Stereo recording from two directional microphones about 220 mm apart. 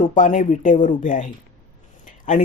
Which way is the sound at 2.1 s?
35° left (ahead or behind).